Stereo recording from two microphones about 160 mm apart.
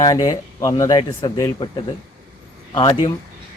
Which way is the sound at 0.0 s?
20° left (ahead or behind).